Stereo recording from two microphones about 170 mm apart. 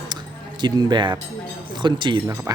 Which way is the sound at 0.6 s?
25° right (ahead or behind).